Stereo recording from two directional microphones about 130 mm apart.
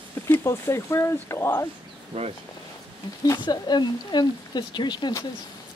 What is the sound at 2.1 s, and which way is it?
Speech, 45° right (ahead or behind).